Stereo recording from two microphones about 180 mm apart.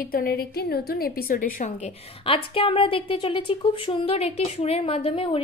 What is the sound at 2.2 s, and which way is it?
A woman's voice, 30° left (ahead or behind).